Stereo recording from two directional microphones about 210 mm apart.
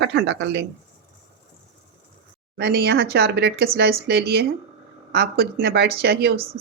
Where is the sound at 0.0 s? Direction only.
55° right (ahead or behind).